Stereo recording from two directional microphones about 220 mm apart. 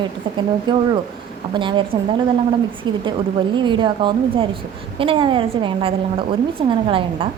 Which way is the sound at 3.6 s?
20° right (ahead or behind).